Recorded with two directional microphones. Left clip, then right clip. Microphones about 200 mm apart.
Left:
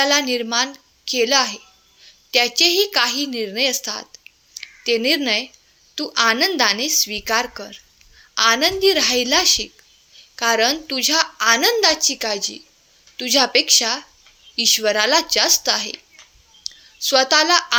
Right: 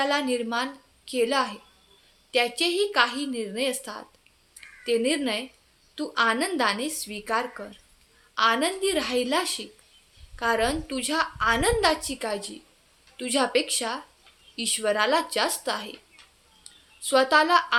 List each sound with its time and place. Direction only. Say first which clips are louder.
0.0 s a woman's voice: left 7 dB; 35° left (ahead or behind)